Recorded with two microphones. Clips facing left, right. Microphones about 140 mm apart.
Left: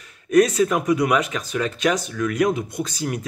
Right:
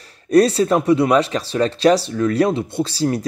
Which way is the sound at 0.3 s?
30° right (ahead or behind).